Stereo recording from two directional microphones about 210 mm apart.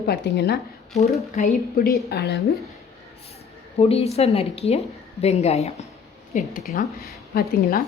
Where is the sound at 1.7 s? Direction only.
45° left (ahead or behind).